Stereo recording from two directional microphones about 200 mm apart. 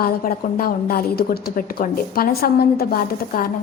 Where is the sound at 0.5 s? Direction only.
45° left (ahead or behind).